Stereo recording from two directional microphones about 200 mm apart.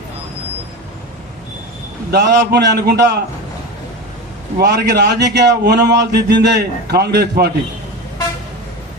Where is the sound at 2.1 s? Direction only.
60° right (ahead or behind).